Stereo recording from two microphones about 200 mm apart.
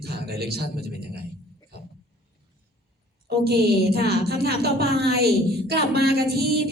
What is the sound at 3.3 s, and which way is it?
A woman's voice, 55° right (ahead or behind).